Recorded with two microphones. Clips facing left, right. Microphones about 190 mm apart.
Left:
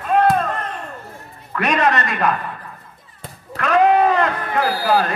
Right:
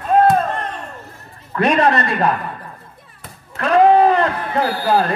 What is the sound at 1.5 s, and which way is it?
Speech, 30° right (ahead or behind).